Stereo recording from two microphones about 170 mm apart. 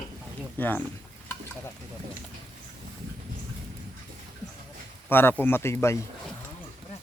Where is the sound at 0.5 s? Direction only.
10° left (ahead or behind).